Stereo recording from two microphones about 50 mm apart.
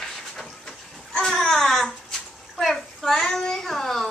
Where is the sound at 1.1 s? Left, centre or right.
Centre.